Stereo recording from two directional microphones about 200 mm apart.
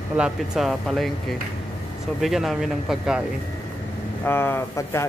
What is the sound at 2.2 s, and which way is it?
Speech, centre (ahead or behind).